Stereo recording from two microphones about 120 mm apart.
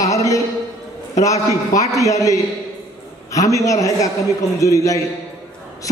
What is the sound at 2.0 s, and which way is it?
A man's voice, 25° left (ahead or behind).